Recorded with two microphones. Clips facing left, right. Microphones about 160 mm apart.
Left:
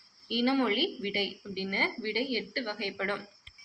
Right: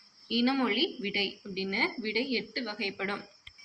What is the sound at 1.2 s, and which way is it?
A woman's voice, 15° right (ahead or behind).